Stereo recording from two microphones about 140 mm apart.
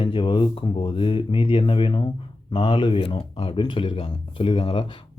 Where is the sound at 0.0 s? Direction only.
35° left (ahead or behind).